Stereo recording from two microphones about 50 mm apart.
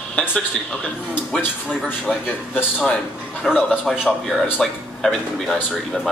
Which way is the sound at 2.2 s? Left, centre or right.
Left.